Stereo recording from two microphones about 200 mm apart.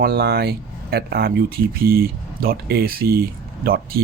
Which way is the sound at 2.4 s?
50° right (ahead or behind).